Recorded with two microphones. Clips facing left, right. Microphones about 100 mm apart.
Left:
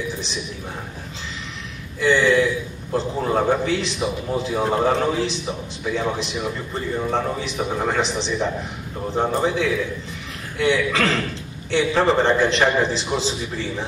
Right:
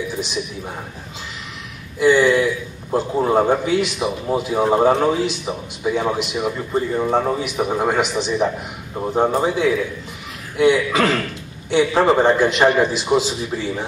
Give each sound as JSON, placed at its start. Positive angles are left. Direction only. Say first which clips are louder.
{"t": 2.0, "sound": "speech", "louder": "right 3 dB", "side_deg": -15}